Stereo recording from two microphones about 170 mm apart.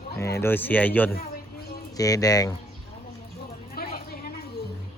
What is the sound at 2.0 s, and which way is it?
Speech, 20° left (ahead or behind).